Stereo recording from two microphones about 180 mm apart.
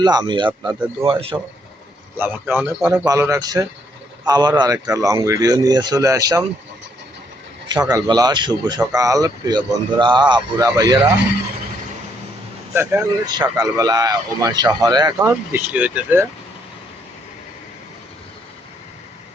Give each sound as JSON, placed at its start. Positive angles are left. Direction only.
{"t": 0.0, "sound": "speech", "side_deg": -25}
{"t": 0.6, "sound": "a man's voice", "side_deg": -5}
{"t": 1.0, "sound": "speech", "side_deg": -30}
{"t": 2.1, "sound": "a man's voice", "side_deg": -10}
{"t": 7.7, "sound": "speech", "side_deg": -20}
{"t": 12.7, "sound": "speech", "side_deg": -15}